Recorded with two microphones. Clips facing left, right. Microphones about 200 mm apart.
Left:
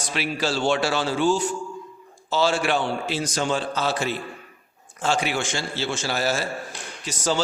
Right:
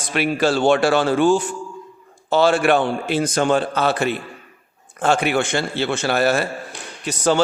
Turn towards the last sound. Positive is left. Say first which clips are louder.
# right 6 dB
turn(degrees=-60)  # may be behind; listen again after turning